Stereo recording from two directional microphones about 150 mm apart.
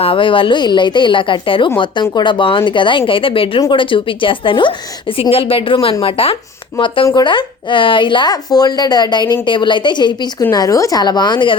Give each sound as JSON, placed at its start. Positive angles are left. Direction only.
{"t": 0.0, "sound": "a woman's voice", "side_deg": 35}